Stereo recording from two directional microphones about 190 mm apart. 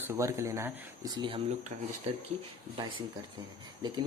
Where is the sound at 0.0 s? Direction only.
15° right (ahead or behind).